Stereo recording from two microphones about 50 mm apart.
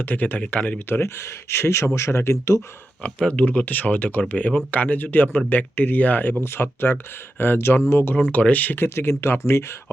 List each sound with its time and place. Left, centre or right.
0.0 s speech: left
1.0 s speech: left
3.0 s speech: left
6.4 s speech: left
7.8 s speech: left
8.1 s speech: left